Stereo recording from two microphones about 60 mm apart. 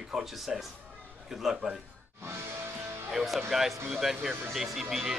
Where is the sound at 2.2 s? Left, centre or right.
Right.